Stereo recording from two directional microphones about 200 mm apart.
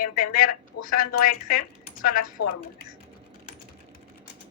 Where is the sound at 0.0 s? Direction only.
45° left (ahead or behind).